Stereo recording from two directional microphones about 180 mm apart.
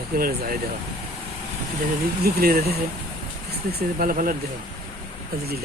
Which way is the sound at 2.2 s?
60° right (ahead or behind).